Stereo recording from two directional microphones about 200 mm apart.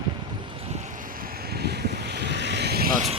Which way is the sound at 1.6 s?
55° right (ahead or behind).